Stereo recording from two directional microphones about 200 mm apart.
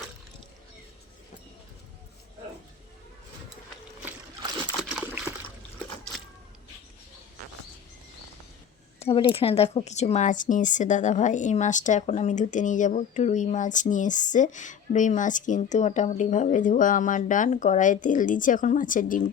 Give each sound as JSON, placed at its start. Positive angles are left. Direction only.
{"t": 9.0, "sound": "speech", "side_deg": 25}